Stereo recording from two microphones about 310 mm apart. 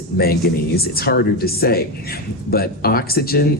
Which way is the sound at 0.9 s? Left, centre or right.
Left.